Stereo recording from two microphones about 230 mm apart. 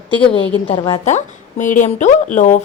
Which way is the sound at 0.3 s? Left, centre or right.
Left.